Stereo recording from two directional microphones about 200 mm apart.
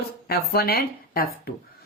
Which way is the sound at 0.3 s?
50° left (ahead or behind).